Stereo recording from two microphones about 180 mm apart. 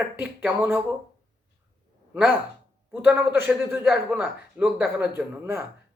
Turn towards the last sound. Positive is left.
turn(degrees=-10)  # may be behind; listen again after turning